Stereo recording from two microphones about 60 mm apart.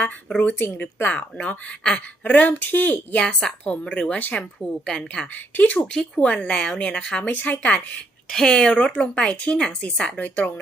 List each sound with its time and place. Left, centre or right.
0.6 s a woman's voice: left
1.0 s a woman's voice: left
5.3 s a woman's voice: left
5.7 s a woman's voice: centre
7.7 s a woman's voice: centre